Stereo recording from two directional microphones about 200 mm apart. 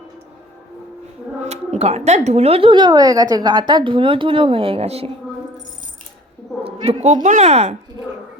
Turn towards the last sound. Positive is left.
turn(degrees=-35)  # may be behind; listen again after turning